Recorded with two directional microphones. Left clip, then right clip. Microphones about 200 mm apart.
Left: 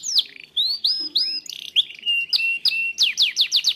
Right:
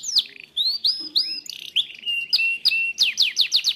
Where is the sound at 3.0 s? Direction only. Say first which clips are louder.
Left 4 dB; 10° left (ahead or behind).